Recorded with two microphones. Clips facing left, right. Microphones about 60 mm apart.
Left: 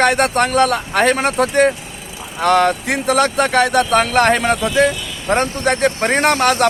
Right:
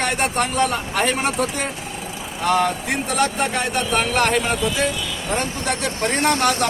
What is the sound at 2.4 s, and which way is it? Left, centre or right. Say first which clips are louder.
Speech: left 5 dB; left.